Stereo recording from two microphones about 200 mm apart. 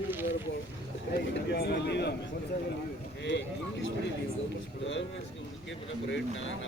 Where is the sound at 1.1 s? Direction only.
55° left (ahead or behind).